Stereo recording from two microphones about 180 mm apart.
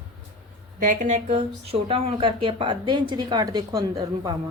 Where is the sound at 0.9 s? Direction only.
40° right (ahead or behind).